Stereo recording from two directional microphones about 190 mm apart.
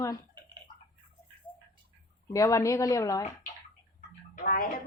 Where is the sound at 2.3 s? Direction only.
15° left (ahead or behind).